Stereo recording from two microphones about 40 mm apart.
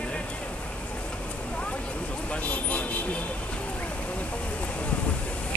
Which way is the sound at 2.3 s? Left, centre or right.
Left.